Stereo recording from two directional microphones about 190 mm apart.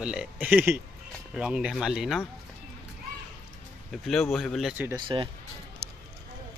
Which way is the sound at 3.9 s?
Centre (ahead or behind).